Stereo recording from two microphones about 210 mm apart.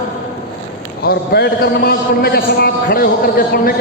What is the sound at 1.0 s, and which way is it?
A man's voice, 50° left (ahead or behind).